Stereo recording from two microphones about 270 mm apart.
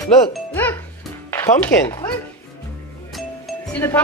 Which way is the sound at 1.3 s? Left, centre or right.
Centre.